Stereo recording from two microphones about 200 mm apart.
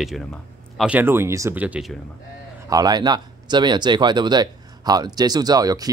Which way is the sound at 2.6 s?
20° right (ahead or behind).